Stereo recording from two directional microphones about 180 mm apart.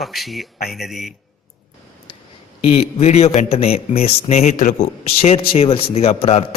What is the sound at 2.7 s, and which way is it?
A man's voice, 35° left (ahead or behind).